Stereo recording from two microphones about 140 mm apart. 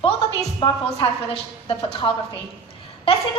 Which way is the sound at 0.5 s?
35° left (ahead or behind).